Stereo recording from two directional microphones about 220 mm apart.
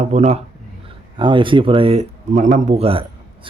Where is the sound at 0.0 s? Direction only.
30° right (ahead or behind).